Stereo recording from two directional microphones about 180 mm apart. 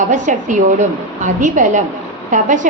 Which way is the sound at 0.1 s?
45° right (ahead or behind).